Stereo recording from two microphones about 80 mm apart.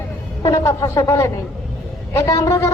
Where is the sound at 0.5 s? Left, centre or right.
Left.